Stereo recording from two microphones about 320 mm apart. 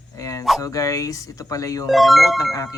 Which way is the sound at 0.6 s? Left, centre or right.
Centre.